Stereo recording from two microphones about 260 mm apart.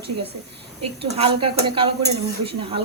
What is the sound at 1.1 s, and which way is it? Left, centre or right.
A woman's voice, right.